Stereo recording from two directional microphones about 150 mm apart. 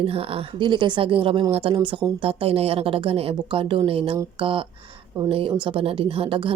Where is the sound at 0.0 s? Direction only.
40° right (ahead or behind).